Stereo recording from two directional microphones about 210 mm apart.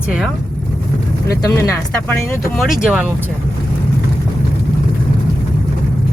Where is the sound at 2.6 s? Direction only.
5° right (ahead or behind).